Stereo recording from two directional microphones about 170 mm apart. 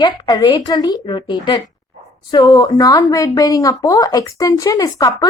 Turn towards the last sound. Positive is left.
turn(degrees=20)  # may be behind; listen again after turning